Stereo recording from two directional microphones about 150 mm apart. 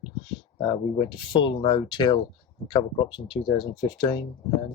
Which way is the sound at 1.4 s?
35° left (ahead or behind).